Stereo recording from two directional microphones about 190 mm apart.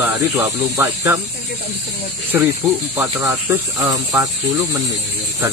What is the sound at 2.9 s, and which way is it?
Speech, 15° right (ahead or behind).